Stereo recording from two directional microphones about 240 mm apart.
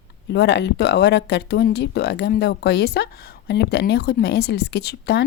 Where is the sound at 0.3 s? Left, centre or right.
Left.